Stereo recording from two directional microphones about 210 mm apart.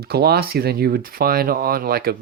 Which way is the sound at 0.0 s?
50° right (ahead or behind).